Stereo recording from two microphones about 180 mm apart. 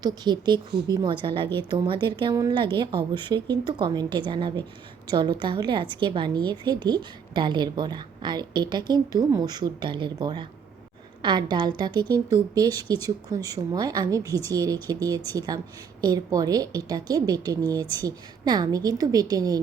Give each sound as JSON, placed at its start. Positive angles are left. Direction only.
{"t": 0.0, "sound": "a woman's voice", "side_deg": -25}